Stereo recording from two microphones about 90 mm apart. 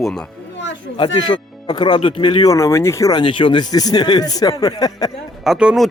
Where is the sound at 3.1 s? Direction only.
65° left (ahead or behind); by 5.1 s 45° left (ahead or behind).